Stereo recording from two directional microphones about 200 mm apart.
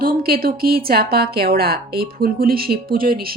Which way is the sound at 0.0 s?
50° right (ahead or behind).